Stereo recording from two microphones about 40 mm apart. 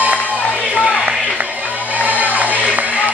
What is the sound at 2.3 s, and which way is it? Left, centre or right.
Music, right.